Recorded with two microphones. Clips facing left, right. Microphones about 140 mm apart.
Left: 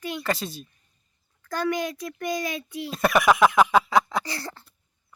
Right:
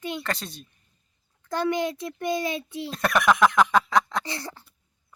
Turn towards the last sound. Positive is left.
turn(degrees=-15)  # may be behind; listen again after turning